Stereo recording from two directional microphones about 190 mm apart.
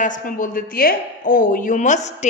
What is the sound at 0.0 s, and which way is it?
A woman's voice, 45° left (ahead or behind).